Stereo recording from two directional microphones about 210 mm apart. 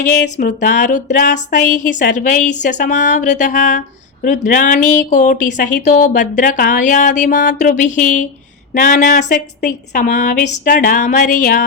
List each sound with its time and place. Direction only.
0.3 s a woman's voice: 40° left (ahead or behind)